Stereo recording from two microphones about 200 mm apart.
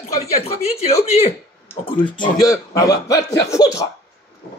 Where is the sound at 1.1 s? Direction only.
30° left (ahead or behind).